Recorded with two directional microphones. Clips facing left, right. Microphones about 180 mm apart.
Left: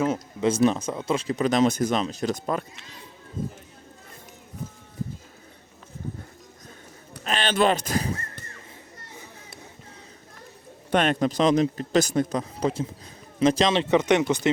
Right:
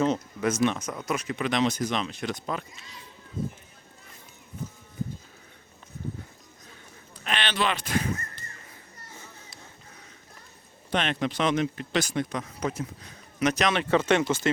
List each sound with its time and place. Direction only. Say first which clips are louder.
0.4 s speech: left 4 dB; 35° left (ahead or behind)
7.3 s speech: left 6 dB; 45° left (ahead or behind)
10.9 s speech: left 6 dB; 45° left (ahead or behind); by 14.5 s 15° left (ahead or behind)